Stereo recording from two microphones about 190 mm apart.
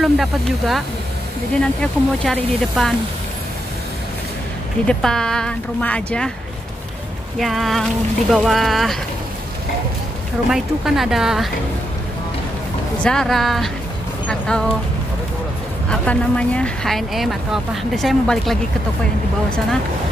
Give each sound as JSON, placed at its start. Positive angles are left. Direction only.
{"t": 0.0, "sound": "speech", "side_deg": 0}
{"t": 4.8, "sound": "speech", "side_deg": 5}
{"t": 7.3, "sound": "speech", "side_deg": 0}
{"t": 10.5, "sound": "speech", "side_deg": 0}
{"t": 13.0, "sound": "speech", "side_deg": 5}
{"t": 15.9, "sound": "speech", "side_deg": 5}